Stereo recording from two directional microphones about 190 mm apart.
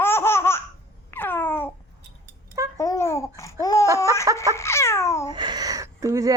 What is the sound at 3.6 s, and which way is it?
Laughter, 15° left (ahead or behind).